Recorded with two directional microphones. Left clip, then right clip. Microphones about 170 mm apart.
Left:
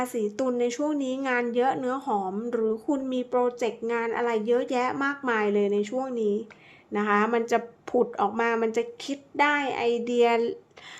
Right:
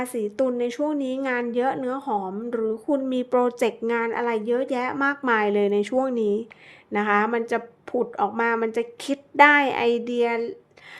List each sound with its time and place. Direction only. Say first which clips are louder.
0.0 s a woman's voice: right 3 dB; 15° right (ahead or behind)
3.1 s a woman's voice: right 2 dB; 30° right (ahead or behind); by 8.9 s 10° right (ahead or behind)
9.0 s speech: right 10 dB; 25° right (ahead or behind); by 10.5 s 5° right (ahead or behind)